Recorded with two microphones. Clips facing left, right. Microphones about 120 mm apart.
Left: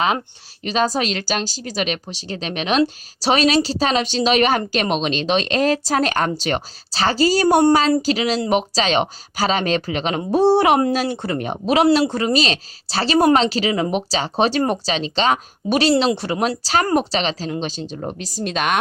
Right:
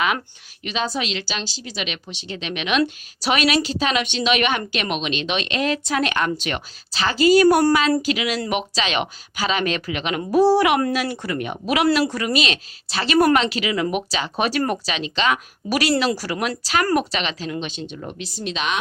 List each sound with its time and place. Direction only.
0.6 s speech: 40° left (ahead or behind)